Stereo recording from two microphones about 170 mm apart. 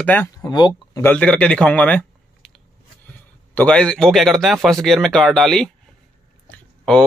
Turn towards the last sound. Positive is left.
turn(degrees=5)  # may be behind; listen again after turning